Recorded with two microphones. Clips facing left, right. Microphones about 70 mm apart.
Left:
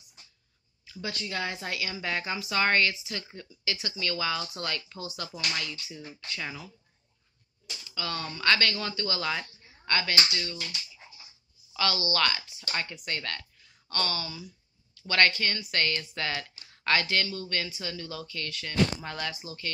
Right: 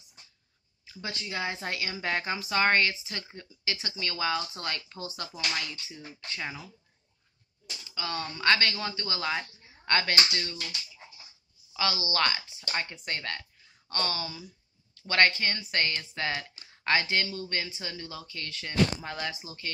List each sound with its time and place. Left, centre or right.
0.8 s speech: right
1.6 s a woman's voice: right
7.9 s speech: right
9.8 s a woman's voice: right
11.7 s speech: right